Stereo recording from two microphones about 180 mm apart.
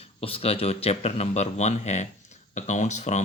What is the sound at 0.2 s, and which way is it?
Speech, 30° left (ahead or behind).